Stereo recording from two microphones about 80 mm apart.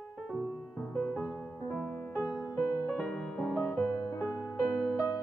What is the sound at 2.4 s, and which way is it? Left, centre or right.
Music, left.